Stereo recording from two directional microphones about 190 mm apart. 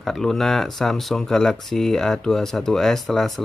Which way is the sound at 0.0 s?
Centre (ahead or behind).